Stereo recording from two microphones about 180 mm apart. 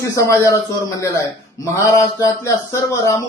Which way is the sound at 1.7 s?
15° left (ahead or behind).